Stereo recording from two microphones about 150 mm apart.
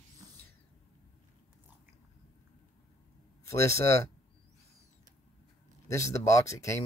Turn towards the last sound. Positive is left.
turn(degrees=20)  # may be behind; listen again after turning